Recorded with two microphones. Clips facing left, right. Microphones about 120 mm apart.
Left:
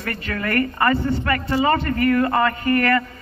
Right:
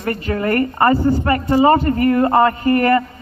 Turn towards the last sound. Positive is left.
turn(degrees=-30)  # may be behind; listen again after turning